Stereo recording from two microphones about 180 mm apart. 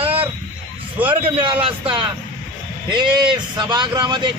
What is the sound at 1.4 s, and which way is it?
Speech, 30° right (ahead or behind).